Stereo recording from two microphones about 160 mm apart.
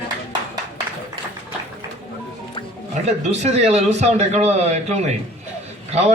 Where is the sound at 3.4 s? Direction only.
45° right (ahead or behind).